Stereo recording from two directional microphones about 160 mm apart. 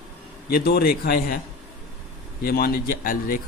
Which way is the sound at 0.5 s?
75° left (ahead or behind).